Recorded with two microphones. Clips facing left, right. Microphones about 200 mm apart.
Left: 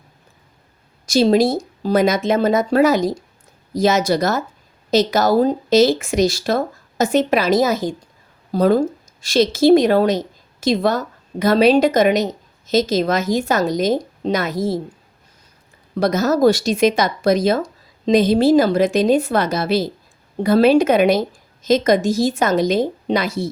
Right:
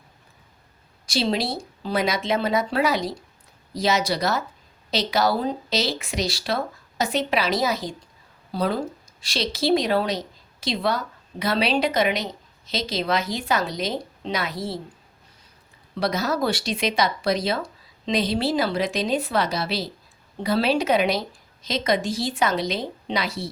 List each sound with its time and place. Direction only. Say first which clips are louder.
1.0 s speech: left 10 dB; 45° left (ahead or behind)
16.0 s speech: left 8 dB; 45° left (ahead or behind)